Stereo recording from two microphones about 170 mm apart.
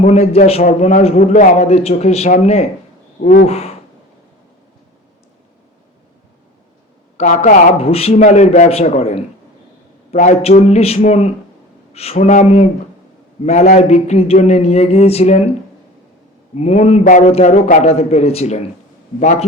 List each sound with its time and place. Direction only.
0.0 s a man's voice: 40° left (ahead or behind)
7.2 s a man's voice: 45° left (ahead or behind)
16.6 s a man's voice: 40° left (ahead or behind)